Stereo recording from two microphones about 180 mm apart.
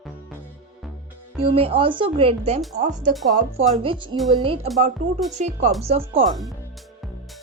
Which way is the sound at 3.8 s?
30° right (ahead or behind).